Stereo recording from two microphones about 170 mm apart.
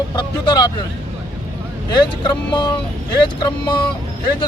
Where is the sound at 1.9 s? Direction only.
25° left (ahead or behind).